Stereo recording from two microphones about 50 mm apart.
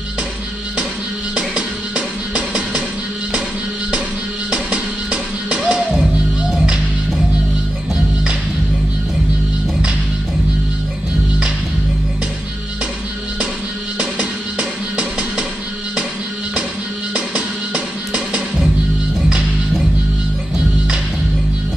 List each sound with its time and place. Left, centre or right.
1.3 s music: right
4.5 s music: right
14.6 s music: right
17.1 s music: right